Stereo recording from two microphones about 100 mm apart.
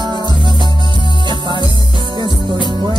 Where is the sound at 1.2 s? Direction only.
50° right (ahead or behind).